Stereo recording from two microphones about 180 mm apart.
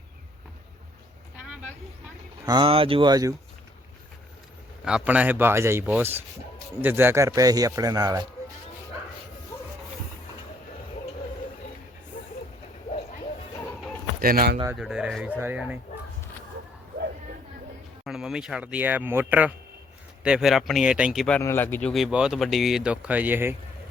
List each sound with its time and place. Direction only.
2.5 s a man's voice: 30° right (ahead or behind)
4.9 s a man's voice: 5° right (ahead or behind); by 8.3 s 20° right (ahead or behind)
14.2 s speech: 55° right (ahead or behind)
14.8 s speech: 5° right (ahead or behind)
18.0 s speech: 5° right (ahead or behind)